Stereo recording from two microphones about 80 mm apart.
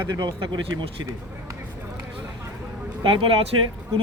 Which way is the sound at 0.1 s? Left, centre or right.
Right.